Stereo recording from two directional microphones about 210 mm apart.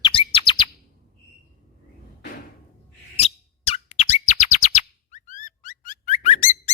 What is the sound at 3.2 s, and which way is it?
Bird, 30° left (ahead or behind).